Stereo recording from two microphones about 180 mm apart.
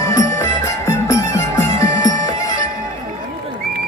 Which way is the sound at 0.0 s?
15° left (ahead or behind).